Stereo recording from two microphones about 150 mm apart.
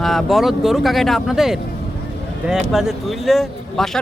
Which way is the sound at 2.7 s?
Centre (ahead or behind).